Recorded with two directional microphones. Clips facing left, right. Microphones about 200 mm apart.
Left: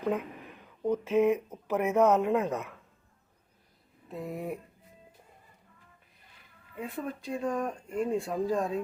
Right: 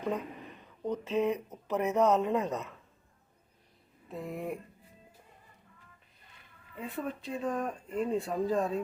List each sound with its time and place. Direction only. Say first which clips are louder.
0.0 s a sound: left 3 dB; 5° left (ahead or behind)
1.5 s speech: left 2 dB; centre (ahead or behind)
2.0 s speech: left 2 dB; 15° left (ahead or behind)
2.3 s speech: left 3 dB; centre (ahead or behind)
4.1 s speech: left 1 dB; centre (ahead or behind)
6.7 s speech: left 1 dB; centre (ahead or behind)